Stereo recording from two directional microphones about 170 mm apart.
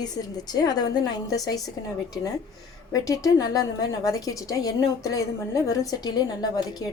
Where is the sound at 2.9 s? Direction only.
20° left (ahead or behind).